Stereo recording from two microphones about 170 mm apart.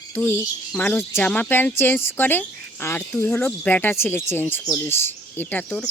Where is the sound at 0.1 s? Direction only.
15° left (ahead or behind).